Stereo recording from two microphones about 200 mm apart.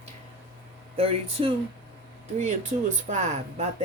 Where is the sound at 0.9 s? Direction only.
30° right (ahead or behind).